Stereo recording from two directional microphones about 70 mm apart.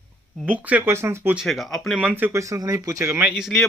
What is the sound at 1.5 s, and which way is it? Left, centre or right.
Speech, centre.